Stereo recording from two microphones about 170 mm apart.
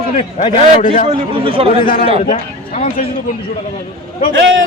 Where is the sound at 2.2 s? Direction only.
55° left (ahead or behind).